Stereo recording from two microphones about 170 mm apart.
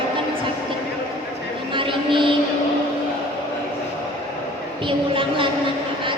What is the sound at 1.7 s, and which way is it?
Music, 30° right (ahead or behind).